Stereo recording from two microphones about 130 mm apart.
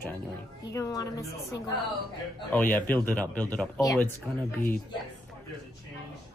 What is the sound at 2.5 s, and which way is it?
Speech, 15° left (ahead or behind).